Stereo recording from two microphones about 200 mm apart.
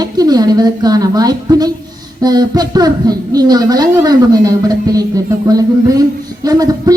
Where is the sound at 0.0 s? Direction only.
20° right (ahead or behind).